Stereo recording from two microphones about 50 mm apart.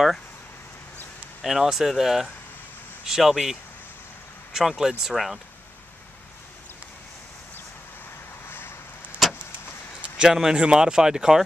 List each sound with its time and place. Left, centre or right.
1.4 s speech: centre
8.5 s vehicle: left
9.2 s vehicle: centre
10.0 s speech: centre